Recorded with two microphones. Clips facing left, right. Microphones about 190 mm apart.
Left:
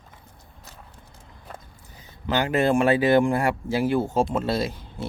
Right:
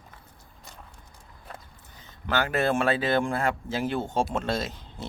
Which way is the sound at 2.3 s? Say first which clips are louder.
Left 4 dB; 15° left (ahead or behind).